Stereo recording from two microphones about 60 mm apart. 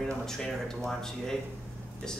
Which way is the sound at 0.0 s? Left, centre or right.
Centre.